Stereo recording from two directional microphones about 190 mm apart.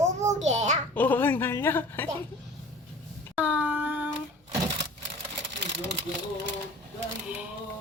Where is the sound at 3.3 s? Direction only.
5° right (ahead or behind).